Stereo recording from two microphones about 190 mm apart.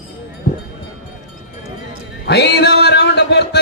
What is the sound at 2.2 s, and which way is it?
Music, 60° left (ahead or behind).